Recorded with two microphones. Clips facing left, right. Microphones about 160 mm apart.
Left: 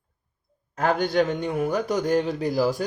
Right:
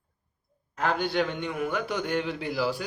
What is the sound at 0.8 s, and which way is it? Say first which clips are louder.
A man's voice: left 5 dB; 45° left (ahead or behind).